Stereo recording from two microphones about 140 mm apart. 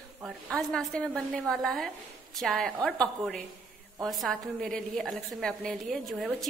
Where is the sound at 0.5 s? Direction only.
5° left (ahead or behind).